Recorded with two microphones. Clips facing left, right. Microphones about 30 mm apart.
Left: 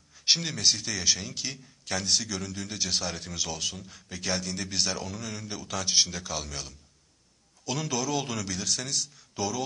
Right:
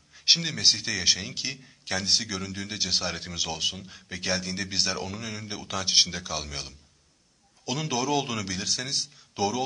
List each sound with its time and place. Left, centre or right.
0.1 s a man's voice: centre